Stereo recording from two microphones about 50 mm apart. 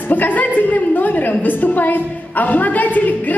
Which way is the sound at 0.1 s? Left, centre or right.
Left.